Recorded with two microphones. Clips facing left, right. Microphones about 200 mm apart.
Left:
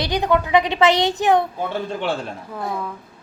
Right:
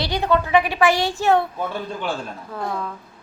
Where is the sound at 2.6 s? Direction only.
10° left (ahead or behind).